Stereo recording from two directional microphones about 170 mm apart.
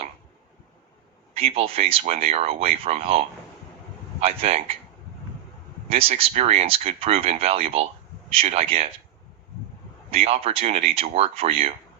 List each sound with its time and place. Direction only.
1.3 s speech: 35° right (ahead or behind)
5.9 s speech: 35° right (ahead or behind)
10.1 s speech: 35° right (ahead or behind)